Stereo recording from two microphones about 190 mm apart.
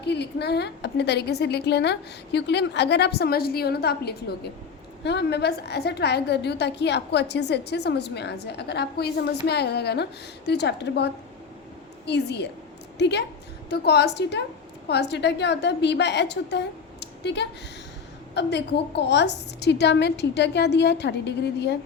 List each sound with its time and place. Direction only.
0.0 s a woman's voice: 60° left (ahead or behind)